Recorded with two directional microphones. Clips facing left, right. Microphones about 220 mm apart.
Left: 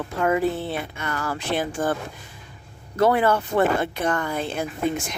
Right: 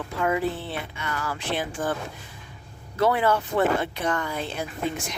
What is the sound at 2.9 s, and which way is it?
Speech, 45° left (ahead or behind).